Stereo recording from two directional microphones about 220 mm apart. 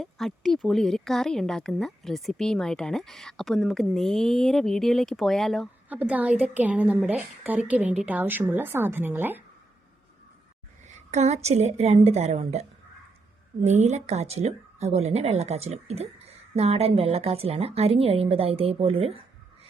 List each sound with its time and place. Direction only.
0.0 s speech: centre (ahead or behind)
10.8 s a woman's voice: 30° right (ahead or behind)